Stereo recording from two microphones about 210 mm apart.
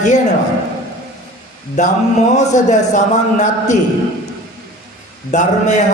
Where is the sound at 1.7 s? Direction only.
35° left (ahead or behind).